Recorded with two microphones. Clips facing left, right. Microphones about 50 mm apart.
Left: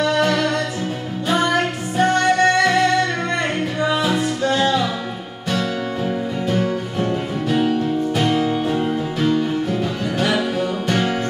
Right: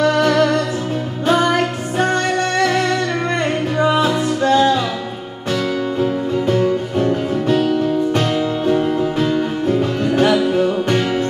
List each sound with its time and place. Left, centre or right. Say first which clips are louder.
2.0 s music: left 2 dB; right
4.0 s music: right 3 dB; right
7.5 s music: right 1 dB; centre
9.3 s music: right 2 dB; right